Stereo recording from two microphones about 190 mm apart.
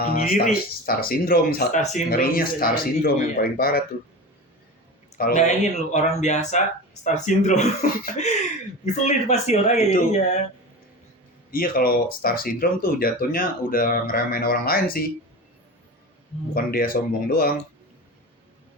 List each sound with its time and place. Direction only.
0.0 s speech: 50° left (ahead or behind)
1.8 s speech: 35° left (ahead or behind)
2.0 s speech: 50° left (ahead or behind)
5.1 s speech: 45° left (ahead or behind)
11.5 s speech: 50° left (ahead or behind)
16.6 s speech: 50° left (ahead or behind)